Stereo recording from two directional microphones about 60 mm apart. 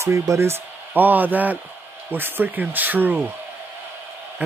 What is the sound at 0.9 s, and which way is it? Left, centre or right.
A man's voice, right.